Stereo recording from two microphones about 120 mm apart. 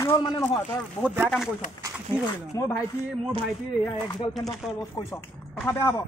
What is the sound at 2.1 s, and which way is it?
Speech, 20° left (ahead or behind).